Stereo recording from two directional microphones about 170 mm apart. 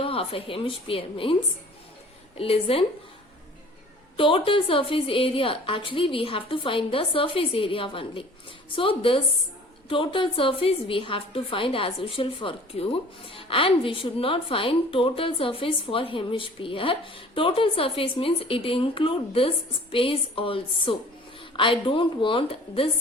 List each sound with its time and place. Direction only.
0.0 s a woman's voice: 35° left (ahead or behind)
2.4 s a woman's voice: 35° left (ahead or behind)
4.2 s a woman's voice: 30° left (ahead or behind)